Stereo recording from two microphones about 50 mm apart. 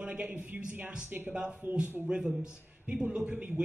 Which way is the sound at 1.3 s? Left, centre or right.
Right.